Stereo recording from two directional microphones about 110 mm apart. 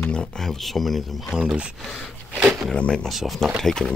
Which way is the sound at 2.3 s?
5° right (ahead or behind).